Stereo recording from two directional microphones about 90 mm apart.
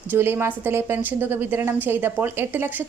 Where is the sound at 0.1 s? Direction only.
25° right (ahead or behind).